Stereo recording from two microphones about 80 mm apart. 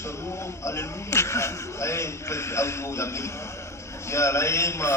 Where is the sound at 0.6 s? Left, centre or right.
Left.